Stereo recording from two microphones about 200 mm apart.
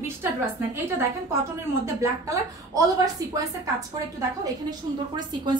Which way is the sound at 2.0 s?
15° right (ahead or behind).